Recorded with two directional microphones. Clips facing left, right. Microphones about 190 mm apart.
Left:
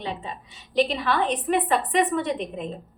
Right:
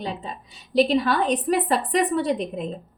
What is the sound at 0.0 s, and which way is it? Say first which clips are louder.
A woman's voice: right 1 dB; 35° right (ahead or behind).